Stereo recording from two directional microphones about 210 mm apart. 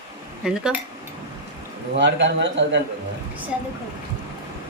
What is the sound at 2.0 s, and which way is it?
Speech, 60° right (ahead or behind).